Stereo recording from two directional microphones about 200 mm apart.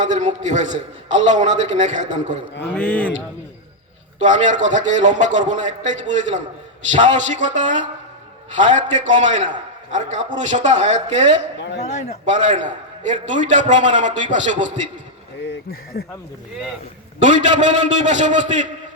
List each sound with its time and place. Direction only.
0.0 s a man's voice: 35° right (ahead or behind)
4.2 s a man's voice: 40° right (ahead or behind)
11.8 s a man's voice: 35° left (ahead or behind)
12.2 s a man's voice: 40° right (ahead or behind)
15.9 s speech: 50° left (ahead or behind)
17.2 s a man's voice: 35° right (ahead or behind)